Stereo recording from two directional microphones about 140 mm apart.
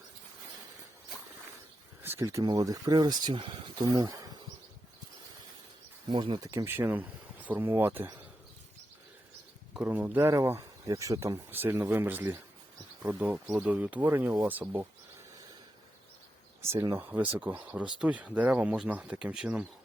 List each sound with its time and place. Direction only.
2.0 s speech: 20° right (ahead or behind)
6.1 s speech: 35° right (ahead or behind)
6.7 s speech: 15° right (ahead or behind)
9.7 s speech: 10° right (ahead or behind)
16.6 s speech: 20° right (ahead or behind)